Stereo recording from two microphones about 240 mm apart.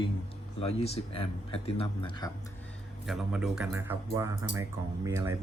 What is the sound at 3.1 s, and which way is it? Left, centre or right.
Speech, centre.